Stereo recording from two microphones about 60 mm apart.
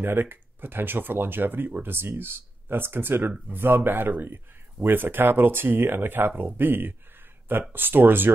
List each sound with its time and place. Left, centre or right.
0.0 s speech: right